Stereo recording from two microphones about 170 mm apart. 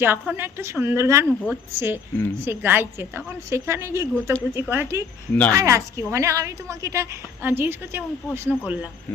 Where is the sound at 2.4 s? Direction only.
10° right (ahead or behind).